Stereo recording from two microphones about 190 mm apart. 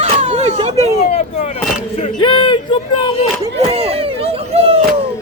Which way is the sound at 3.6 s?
30° right (ahead or behind).